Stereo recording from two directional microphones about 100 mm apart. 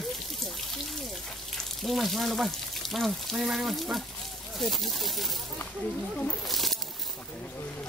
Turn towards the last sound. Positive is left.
turn(degrees=0)  # may be behind; listen again after turning